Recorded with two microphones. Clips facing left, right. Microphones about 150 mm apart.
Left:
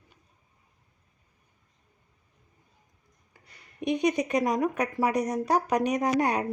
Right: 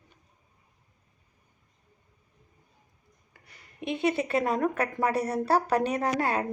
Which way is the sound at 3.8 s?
15° left (ahead or behind).